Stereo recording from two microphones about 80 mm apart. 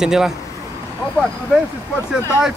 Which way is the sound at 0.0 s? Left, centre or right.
Centre.